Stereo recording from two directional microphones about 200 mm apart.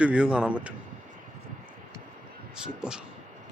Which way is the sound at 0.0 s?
5° right (ahead or behind).